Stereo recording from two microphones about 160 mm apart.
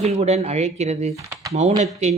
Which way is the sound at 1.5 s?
45° right (ahead or behind).